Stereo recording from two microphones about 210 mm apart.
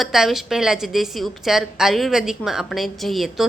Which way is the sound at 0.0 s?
Centre (ahead or behind).